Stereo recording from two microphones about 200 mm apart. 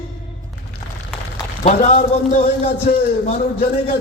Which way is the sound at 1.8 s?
35° left (ahead or behind).